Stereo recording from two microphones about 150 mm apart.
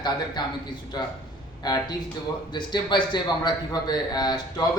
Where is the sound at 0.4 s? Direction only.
30° left (ahead or behind).